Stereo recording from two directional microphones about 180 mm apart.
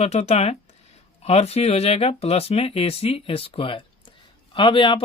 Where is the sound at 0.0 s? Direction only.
35° left (ahead or behind).